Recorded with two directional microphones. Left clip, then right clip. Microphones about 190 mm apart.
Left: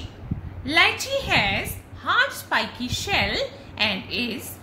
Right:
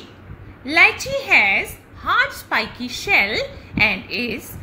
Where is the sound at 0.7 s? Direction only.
10° right (ahead or behind).